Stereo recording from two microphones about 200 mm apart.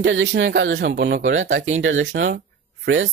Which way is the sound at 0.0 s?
65° right (ahead or behind).